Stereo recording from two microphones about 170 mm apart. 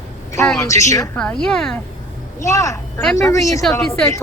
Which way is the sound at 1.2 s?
5° left (ahead or behind).